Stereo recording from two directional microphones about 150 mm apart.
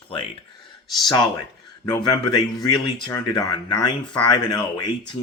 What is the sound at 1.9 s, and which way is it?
Speech, 25° left (ahead or behind).